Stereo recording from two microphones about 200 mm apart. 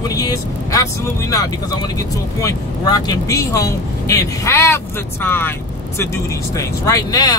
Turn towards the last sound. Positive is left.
turn(degrees=15)  # may be behind; listen again after turning